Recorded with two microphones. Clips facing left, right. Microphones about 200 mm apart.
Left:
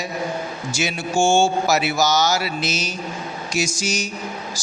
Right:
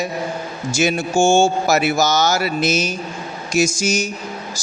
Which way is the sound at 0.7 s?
45° right (ahead or behind).